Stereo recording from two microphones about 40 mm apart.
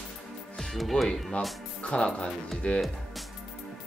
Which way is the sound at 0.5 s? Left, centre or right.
Centre.